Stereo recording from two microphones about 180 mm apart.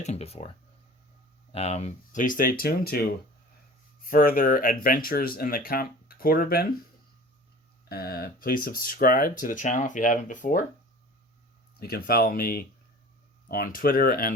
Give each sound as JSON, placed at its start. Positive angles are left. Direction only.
{"t": 0.0, "sound": "speech", "side_deg": 35}
{"t": 1.5, "sound": "speech", "side_deg": 35}
{"t": 7.9, "sound": "speech", "side_deg": 60}
{"t": 11.8, "sound": "speech", "side_deg": 55}